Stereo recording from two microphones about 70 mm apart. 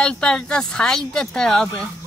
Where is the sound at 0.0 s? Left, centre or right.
Centre.